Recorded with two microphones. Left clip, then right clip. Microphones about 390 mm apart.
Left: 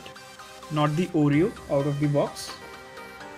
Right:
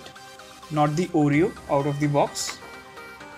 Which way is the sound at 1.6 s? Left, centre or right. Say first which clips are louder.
Right 2 dB; right.